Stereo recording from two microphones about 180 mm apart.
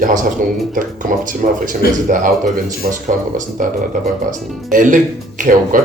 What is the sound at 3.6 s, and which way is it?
Speech, 45° right (ahead or behind).